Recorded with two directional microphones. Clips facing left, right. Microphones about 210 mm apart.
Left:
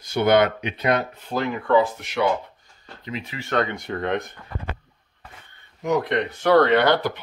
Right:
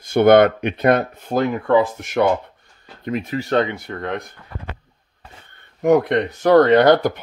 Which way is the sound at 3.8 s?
Centre (ahead or behind).